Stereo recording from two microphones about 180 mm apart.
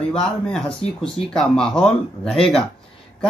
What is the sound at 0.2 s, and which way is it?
Speech, 5° left (ahead or behind).